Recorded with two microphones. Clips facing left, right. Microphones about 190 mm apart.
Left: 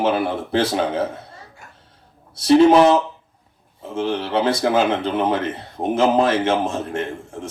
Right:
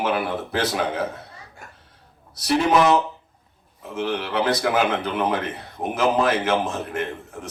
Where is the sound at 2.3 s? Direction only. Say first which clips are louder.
Left 7 dB; 30° left (ahead or behind).